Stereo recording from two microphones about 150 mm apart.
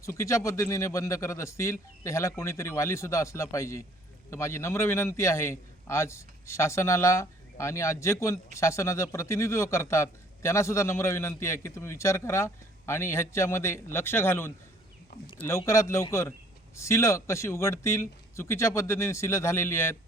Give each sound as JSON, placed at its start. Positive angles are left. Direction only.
{"t": 0.0, "sound": "a man's voice", "side_deg": 20}